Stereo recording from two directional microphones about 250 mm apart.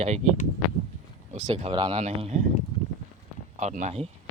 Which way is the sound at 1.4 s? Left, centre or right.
Right.